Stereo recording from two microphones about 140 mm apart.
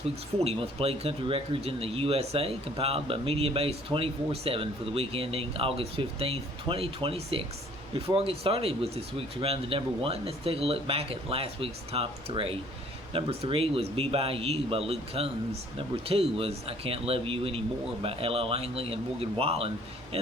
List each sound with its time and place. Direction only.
0.3 s speech: 45° right (ahead or behind)